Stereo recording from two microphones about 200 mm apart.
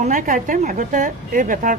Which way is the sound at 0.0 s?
40° right (ahead or behind).